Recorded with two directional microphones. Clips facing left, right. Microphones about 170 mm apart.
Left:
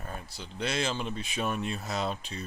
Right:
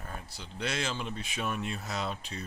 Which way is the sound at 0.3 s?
30° left (ahead or behind).